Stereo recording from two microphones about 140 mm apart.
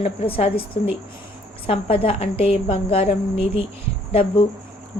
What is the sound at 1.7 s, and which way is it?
A woman's voice, 45° left (ahead or behind).